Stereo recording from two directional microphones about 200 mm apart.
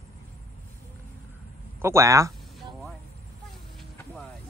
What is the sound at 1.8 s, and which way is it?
Speech, 15° right (ahead or behind).